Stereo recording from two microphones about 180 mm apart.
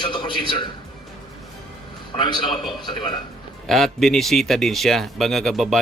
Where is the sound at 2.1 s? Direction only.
25° left (ahead or behind).